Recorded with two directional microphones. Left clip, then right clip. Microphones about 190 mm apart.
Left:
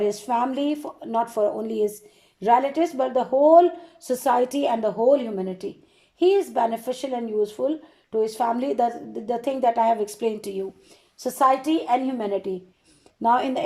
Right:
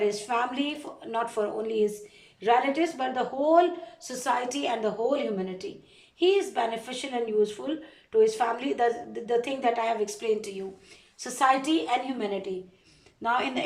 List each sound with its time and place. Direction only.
0.0 s a woman's voice: 35° left (ahead or behind)
11.2 s a woman's voice: 30° left (ahead or behind)